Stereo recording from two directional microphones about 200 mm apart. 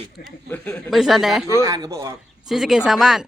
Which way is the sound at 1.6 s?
15° right (ahead or behind).